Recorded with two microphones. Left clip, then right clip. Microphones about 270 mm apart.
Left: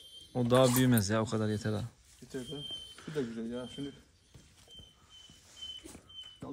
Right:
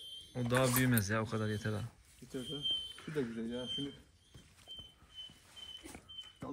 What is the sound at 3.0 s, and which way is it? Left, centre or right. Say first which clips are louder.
Speech: left 2 dB; centre.